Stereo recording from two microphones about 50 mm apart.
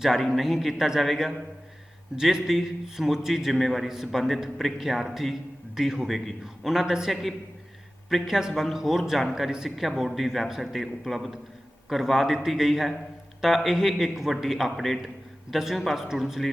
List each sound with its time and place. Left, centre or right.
0.0 s a man's voice: centre
6.1 s a man's voice: centre